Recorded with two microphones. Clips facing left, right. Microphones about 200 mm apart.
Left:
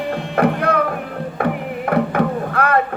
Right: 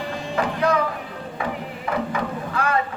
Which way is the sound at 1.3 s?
60° left (ahead or behind).